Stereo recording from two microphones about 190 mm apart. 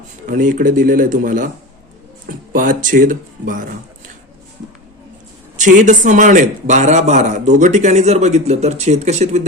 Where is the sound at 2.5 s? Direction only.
45° right (ahead or behind).